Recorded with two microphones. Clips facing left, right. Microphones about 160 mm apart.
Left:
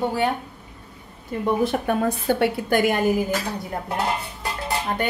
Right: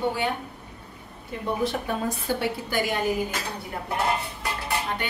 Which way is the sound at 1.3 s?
50° left (ahead or behind).